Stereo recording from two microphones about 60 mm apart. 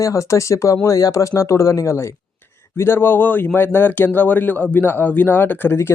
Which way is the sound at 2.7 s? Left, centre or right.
Left.